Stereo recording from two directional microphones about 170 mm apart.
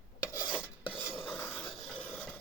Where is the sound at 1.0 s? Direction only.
Centre (ahead or behind).